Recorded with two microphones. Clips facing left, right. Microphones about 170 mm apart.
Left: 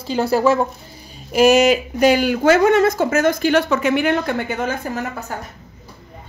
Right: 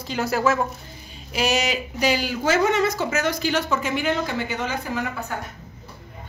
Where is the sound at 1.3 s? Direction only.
50° left (ahead or behind).